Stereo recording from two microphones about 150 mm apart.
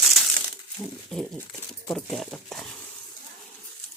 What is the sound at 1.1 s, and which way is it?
Speech, 5° left (ahead or behind).